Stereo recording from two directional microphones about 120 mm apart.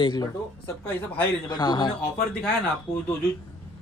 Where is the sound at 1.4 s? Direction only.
35° left (ahead or behind).